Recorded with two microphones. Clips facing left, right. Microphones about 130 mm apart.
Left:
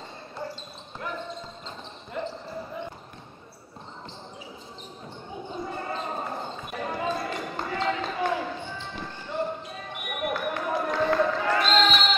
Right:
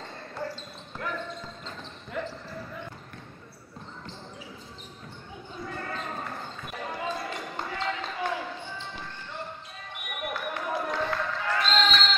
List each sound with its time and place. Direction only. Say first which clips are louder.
0.4 s basketball bounce: right 1 dB; 20° left (ahead or behind)
5.5 s basketball bounce: left 3 dB; 25° left (ahead or behind)
6.8 s basketball bounce: left 4 dB; 50° left (ahead or behind)
7.7 s basketball bounce: left 6 dB; 45° left (ahead or behind)
9.0 s basketball bounce: left 8 dB; 10° left (ahead or behind)
10.2 s basketball bounce: left 4 dB; 45° left (ahead or behind)
11.1 s basketball bounce: left 6 dB; 15° left (ahead or behind)